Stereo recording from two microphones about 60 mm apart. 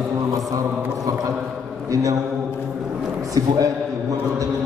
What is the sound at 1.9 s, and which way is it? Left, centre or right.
Speech, right.